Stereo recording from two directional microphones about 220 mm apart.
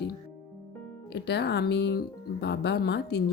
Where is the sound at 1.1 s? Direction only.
50° left (ahead or behind).